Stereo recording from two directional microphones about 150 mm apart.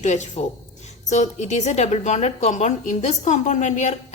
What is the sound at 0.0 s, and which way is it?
A woman's voice, 50° left (ahead or behind).